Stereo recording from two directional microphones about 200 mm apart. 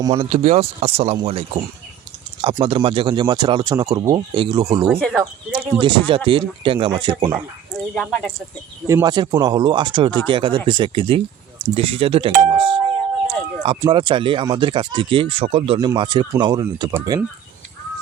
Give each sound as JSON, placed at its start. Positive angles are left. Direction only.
{"t": 0.0, "sound": "speech", "side_deg": -20}
{"t": 0.3, "sound": "speech", "side_deg": -30}
{"t": 4.9, "sound": "speech", "side_deg": 5}
{"t": 5.2, "sound": "speech", "side_deg": -5}
{"t": 5.8, "sound": "speech", "side_deg": -25}
{"t": 7.9, "sound": "speech", "side_deg": 5}
{"t": 8.9, "sound": "speech", "side_deg": -15}